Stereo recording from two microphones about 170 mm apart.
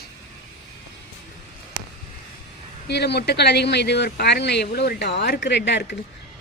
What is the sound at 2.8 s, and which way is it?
Speech, 80° left.